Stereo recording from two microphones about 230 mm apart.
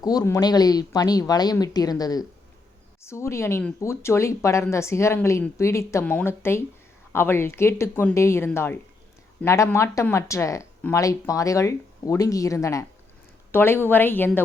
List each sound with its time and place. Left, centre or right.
0.0 s speech: centre